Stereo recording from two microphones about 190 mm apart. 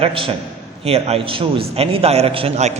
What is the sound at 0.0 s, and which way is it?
A man's voice, 30° right (ahead or behind).